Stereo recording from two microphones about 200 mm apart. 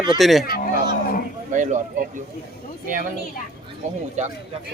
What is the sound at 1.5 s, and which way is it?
Speech, 40° right (ahead or behind).